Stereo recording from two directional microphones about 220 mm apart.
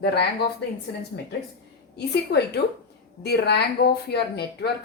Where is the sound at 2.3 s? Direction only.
50° left (ahead or behind).